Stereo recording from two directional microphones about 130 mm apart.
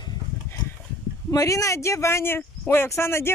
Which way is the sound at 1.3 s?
25° left (ahead or behind).